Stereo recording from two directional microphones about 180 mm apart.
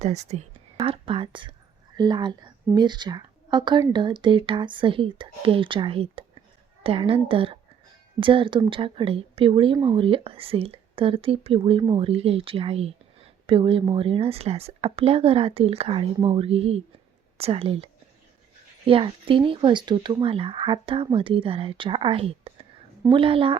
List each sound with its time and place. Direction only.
0.0 s speech: 40° right (ahead or behind)
18.9 s speech: 30° right (ahead or behind)